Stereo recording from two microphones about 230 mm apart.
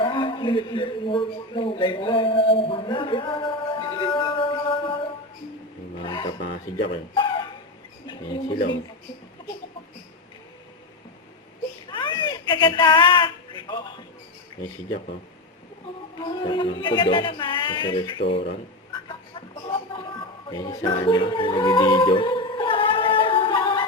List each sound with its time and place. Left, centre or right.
0.0 s a man's voice: left
6.0 s speech: left
11.9 s a sound: left
16.1 s speech: left
19.9 s music: left